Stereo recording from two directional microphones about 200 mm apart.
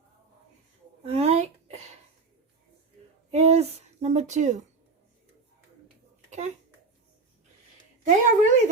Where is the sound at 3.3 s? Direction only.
30° right (ahead or behind).